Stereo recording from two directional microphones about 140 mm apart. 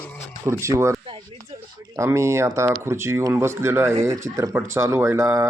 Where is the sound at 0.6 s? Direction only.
20° right (ahead or behind).